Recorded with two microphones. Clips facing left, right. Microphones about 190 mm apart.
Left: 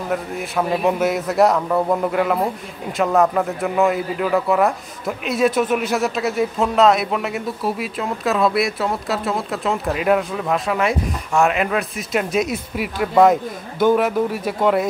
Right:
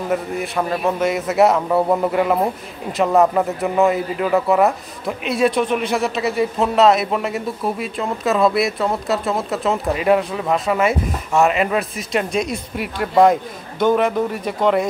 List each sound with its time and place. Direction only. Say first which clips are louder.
0.1 s a man's voice: right 1 dB; centre (ahead or behind)